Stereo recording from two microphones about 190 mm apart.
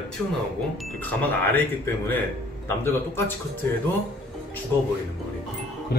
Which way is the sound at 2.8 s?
15° left (ahead or behind).